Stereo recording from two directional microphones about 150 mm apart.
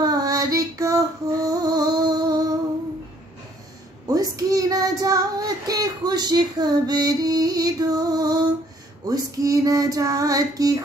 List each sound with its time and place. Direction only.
0.0 s female singing: 25° right (ahead or behind)
4.1 s child singing: 25° right (ahead or behind)